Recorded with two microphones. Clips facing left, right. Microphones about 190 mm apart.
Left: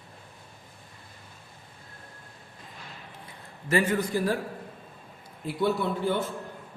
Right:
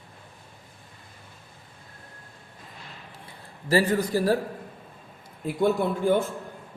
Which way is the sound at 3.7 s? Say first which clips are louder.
Right 3 dB; 35° right (ahead or behind).